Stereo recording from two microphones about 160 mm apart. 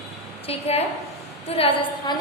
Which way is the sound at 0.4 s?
40° left (ahead or behind).